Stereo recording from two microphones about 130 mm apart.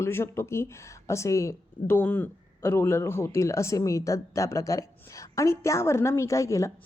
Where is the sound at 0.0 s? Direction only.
20° left (ahead or behind).